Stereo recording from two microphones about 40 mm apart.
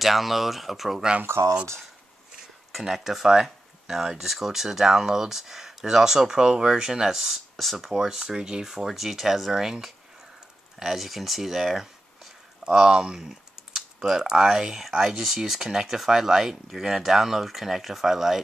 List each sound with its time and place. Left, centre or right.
0.0 s speech: centre
2.8 s speech: centre
12.6 s speech: centre